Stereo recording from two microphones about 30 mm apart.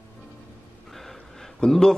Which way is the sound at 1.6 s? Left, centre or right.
Centre.